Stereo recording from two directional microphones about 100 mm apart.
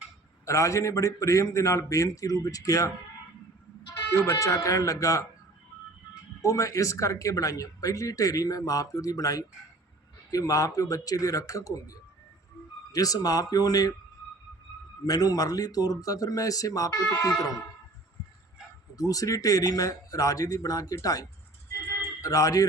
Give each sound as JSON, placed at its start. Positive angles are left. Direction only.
{"t": 0.4, "sound": "speech", "side_deg": 30}
{"t": 4.1, "sound": "speech", "side_deg": 25}
{"t": 6.4, "sound": "speech", "side_deg": 35}
{"t": 15.0, "sound": "speech", "side_deg": 40}
{"t": 18.9, "sound": "speech", "side_deg": 35}
{"t": 21.7, "sound": "a sound", "side_deg": 35}